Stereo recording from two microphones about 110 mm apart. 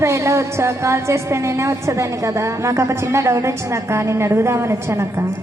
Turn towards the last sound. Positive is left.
turn(degrees=-25)  # may be behind; listen again after turning